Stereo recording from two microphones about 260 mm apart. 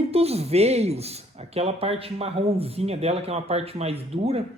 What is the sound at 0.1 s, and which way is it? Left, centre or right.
Speech, right.